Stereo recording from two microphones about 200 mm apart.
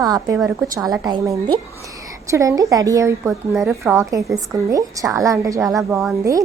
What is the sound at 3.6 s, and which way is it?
Speech, centre (ahead or behind).